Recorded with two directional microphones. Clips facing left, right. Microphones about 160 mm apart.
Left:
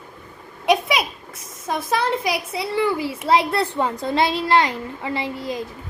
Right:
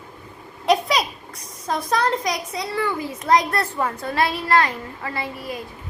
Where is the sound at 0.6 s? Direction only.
Centre (ahead or behind).